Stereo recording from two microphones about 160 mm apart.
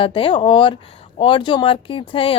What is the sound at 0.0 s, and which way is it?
Speech, 35° left (ahead or behind).